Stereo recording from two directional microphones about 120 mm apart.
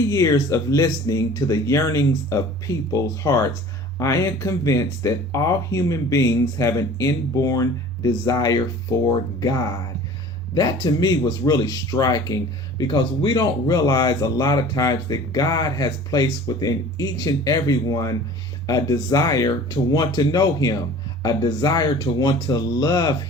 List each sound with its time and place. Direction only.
0.1 s speech: 30° left (ahead or behind)